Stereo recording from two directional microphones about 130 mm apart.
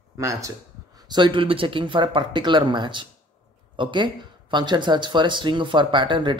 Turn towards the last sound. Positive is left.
turn(degrees=-40)  # may be behind; listen again after turning